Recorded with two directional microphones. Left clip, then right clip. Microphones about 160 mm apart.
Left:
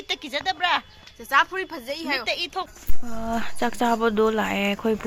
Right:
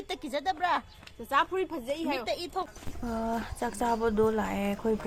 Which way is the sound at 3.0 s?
30° left (ahead or behind).